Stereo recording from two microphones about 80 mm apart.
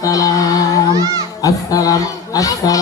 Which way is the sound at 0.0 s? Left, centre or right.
Left.